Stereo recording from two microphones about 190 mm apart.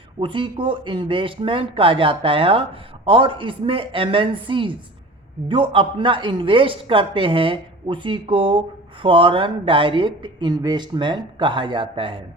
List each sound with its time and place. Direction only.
0.2 s speech: 25° right (ahead or behind)